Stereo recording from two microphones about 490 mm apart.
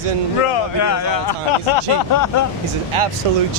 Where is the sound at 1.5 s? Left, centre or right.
Left.